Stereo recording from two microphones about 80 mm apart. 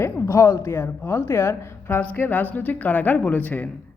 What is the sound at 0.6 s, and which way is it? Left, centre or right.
Speech, left.